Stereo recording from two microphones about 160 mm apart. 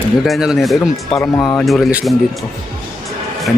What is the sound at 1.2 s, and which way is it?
Speech, 20° left (ahead or behind).